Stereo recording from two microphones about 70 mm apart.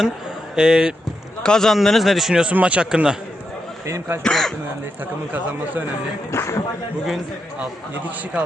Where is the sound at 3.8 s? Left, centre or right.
Right.